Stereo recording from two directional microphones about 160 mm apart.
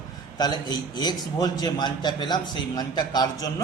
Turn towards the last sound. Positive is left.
turn(degrees=25)  # may be behind; listen again after turning